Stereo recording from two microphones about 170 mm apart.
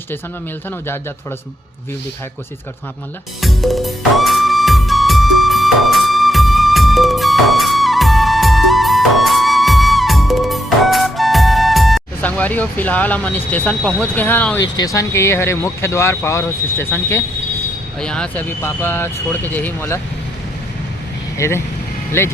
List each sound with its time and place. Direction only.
3.4 s music: centre (ahead or behind)
14.6 s speech: 20° left (ahead or behind)
21.3 s speech: 15° left (ahead or behind)